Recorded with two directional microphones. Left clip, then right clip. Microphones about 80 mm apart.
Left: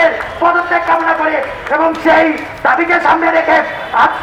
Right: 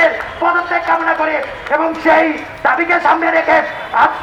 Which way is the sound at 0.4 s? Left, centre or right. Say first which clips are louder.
Left 3 dB; right.